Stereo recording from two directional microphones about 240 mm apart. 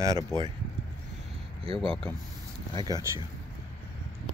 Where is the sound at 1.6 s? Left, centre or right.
Right.